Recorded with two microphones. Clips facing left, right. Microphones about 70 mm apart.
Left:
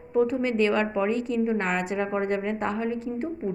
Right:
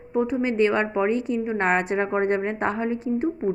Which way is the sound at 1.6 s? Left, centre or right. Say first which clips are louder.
Right 5 dB; right.